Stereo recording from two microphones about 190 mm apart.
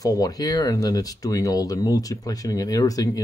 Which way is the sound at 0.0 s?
20° left (ahead or behind).